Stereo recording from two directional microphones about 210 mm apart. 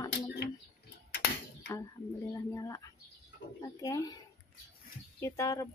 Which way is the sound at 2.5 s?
15° left (ahead or behind).